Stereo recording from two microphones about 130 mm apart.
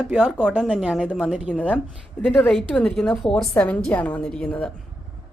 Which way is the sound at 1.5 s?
10° left (ahead or behind).